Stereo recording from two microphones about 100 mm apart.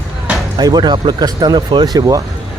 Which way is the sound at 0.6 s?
45° right (ahead or behind).